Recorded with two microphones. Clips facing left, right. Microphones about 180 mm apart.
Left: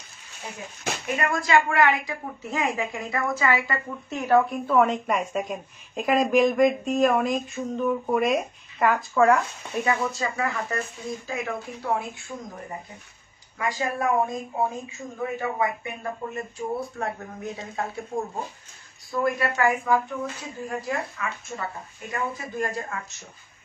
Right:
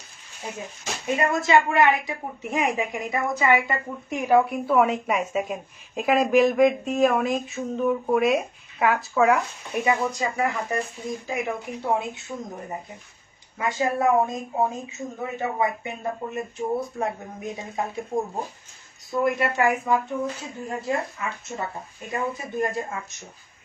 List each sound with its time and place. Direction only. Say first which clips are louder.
1.0 s a woman's voice: right 4 dB; 25° right (ahead or behind)
13.6 s speech: right 3 dB; 25° right (ahead or behind)
19.2 s speech: right 1 dB; 20° right (ahead or behind)